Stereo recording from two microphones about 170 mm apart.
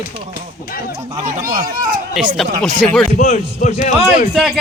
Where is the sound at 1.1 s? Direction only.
40° right (ahead or behind).